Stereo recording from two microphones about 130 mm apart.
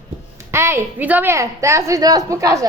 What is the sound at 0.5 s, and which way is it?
A woman's voice, 20° right (ahead or behind).